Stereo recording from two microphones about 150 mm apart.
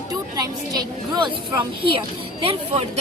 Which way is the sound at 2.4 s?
40° right (ahead or behind).